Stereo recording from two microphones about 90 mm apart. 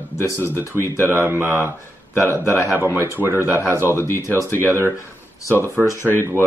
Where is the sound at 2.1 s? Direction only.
25° left (ahead or behind).